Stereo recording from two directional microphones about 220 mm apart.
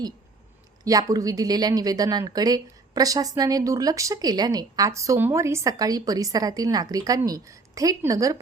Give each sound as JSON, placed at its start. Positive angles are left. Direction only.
{"t": 0.9, "sound": "speech", "side_deg": -15}